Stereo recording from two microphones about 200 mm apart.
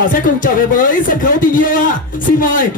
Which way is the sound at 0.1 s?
45° left (ahead or behind).